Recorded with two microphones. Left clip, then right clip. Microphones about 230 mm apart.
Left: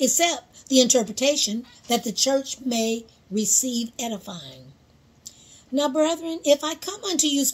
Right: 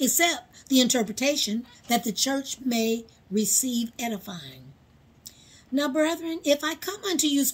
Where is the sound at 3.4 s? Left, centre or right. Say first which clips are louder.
Left 5 dB; left.